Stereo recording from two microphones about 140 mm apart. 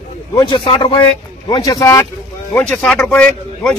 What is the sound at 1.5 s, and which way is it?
Speech, 25° left (ahead or behind).